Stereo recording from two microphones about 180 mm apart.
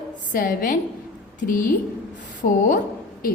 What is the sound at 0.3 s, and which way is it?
A woman's voice, 50° left (ahead or behind).